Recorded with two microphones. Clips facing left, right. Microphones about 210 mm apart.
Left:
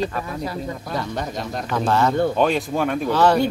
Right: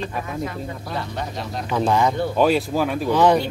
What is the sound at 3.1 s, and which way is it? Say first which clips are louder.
Speech: right 2 dB; 15° right (ahead or behind).